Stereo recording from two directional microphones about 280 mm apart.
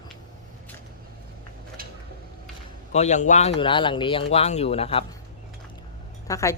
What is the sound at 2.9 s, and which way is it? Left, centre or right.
Speech, left.